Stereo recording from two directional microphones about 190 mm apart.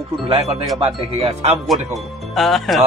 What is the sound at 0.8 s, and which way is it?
Speech, 30° right (ahead or behind).